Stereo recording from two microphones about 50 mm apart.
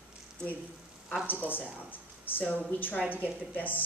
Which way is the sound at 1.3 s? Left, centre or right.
Left.